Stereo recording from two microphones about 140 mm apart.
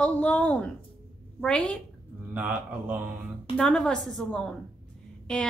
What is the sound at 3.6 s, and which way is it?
A woman's voice, 5° left (ahead or behind).